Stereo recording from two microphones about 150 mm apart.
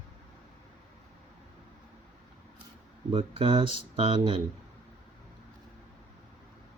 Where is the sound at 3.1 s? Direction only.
35° right (ahead or behind).